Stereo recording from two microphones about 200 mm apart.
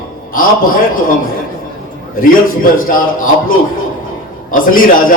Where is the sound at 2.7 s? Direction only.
45° left (ahead or behind).